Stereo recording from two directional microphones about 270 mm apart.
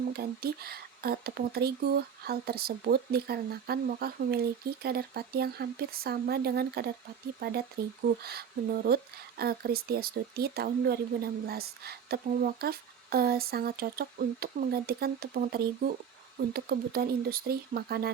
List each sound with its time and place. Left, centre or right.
0.1 s speech: right